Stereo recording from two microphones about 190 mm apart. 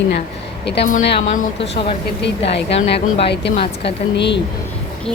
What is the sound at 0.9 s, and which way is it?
Speech, 45° left (ahead or behind).